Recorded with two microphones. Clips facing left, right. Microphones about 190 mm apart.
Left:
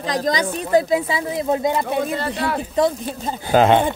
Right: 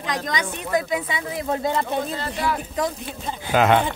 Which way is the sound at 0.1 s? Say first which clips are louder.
Left 6 dB; 35° left (ahead or behind).